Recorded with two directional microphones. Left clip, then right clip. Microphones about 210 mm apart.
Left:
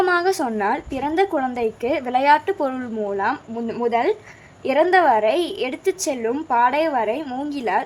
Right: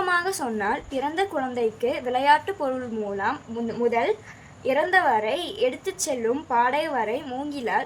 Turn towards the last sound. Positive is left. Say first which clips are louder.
# left 4 dB
turn(degrees=30)  # may be behind; listen again after turning